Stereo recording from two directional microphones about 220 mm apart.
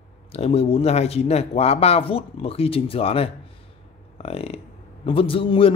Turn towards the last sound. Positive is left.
turn(degrees=25)  # may be behind; listen again after turning